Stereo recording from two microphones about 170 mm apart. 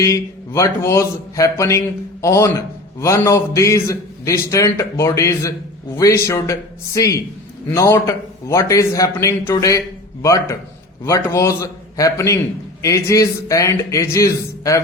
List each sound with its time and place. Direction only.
0.0 s a man's voice: 20° left (ahead or behind)